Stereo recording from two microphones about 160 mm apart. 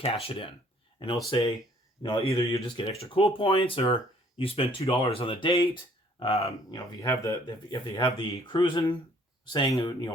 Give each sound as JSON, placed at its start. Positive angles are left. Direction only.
{"t": 0.0, "sound": "speech", "side_deg": 35}
{"t": 6.7, "sound": "speech", "side_deg": 20}
{"t": 8.0, "sound": "speech", "side_deg": 30}